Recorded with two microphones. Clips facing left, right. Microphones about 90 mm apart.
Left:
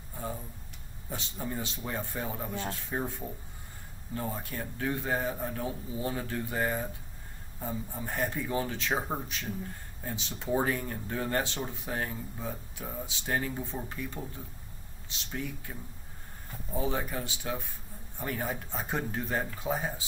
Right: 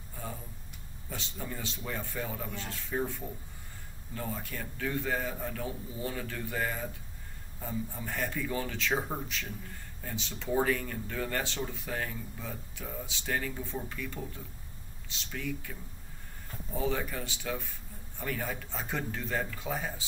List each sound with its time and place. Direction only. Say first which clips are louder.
1.1 s speech: left 3 dB; 25° left (ahead or behind)
15.3 s speech: even; 30° left (ahead or behind)